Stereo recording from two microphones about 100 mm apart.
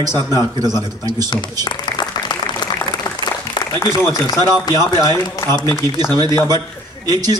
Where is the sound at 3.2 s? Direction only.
45° left (ahead or behind).